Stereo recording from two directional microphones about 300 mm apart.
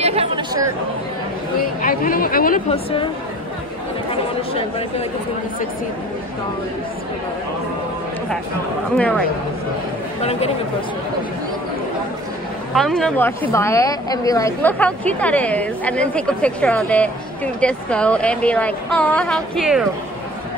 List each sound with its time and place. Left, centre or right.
0.0 s chatter: centre
1.6 s a woman's voice: left
4.1 s a woman's voice: centre
8.9 s speech: centre
12.7 s speech: centre